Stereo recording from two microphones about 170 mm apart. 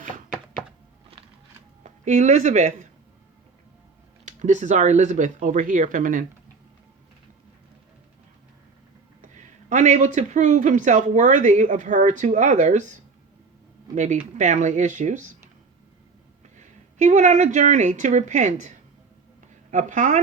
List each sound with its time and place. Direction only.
1.8 s a woman's voice: 45° right (ahead or behind)
4.3 s speech: 45° right (ahead or behind)
9.2 s speech: 50° right (ahead or behind)
13.9 s speech: 45° right (ahead or behind)
16.6 s a woman's voice: 45° right (ahead or behind)